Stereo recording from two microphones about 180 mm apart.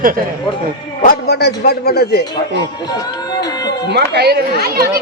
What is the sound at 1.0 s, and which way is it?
A man's voice, 65° left (ahead or behind).